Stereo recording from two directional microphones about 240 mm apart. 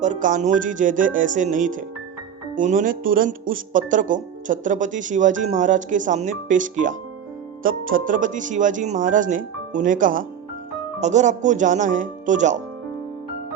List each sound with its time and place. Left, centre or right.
0.0 s speech: right